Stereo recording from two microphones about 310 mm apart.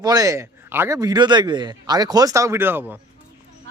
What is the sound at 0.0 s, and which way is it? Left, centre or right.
Speech, centre.